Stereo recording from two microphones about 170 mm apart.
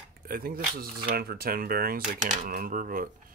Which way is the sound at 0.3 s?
60° right (ahead or behind).